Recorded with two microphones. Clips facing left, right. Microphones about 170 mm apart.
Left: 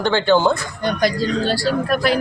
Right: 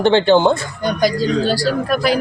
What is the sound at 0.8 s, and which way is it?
Speech, centre (ahead or behind).